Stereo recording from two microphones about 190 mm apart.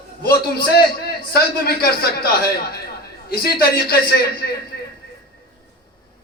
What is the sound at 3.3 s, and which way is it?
Speech, 55° left (ahead or behind).